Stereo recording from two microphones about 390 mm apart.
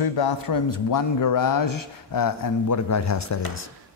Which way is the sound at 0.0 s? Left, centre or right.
Left.